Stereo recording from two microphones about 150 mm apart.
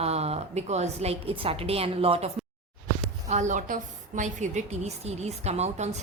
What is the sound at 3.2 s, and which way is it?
A woman's voice, 55° right (ahead or behind).